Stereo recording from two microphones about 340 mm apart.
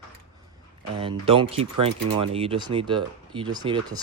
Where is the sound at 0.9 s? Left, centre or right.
Centre.